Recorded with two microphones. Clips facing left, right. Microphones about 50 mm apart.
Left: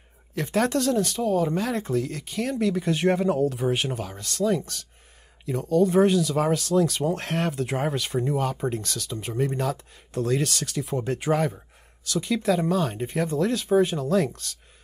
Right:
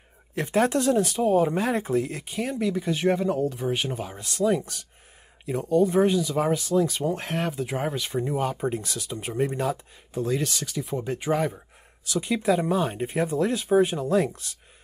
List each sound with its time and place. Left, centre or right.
0.3 s speech: right
5.9 s speech: centre
12.1 s speech: centre